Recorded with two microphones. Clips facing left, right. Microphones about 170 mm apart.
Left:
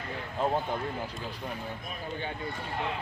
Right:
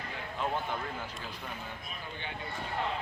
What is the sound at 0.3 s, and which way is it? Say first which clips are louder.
Speech: left 5 dB; 35° left (ahead or behind).